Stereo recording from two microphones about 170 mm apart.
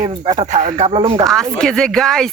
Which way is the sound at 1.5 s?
5° left (ahead or behind).